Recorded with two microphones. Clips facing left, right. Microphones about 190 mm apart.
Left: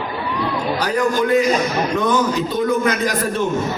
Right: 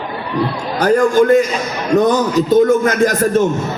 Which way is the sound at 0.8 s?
50° right (ahead or behind).